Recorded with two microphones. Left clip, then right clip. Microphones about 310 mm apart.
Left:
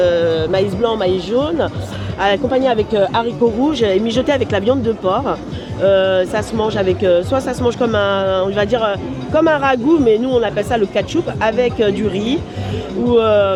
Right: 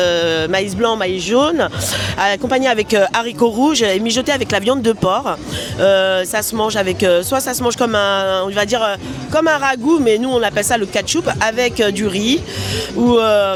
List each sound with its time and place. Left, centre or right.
0.0 s speech: right